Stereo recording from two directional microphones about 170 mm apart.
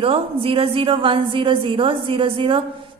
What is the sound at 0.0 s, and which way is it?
A woman's voice, 30° right (ahead or behind).